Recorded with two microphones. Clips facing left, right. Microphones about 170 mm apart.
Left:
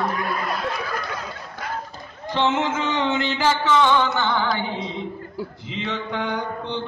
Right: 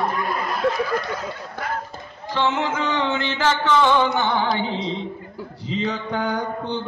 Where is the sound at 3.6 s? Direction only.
Centre (ahead or behind).